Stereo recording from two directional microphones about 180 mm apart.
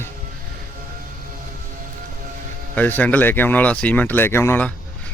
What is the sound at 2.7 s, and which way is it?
Speech, 10° left (ahead or behind).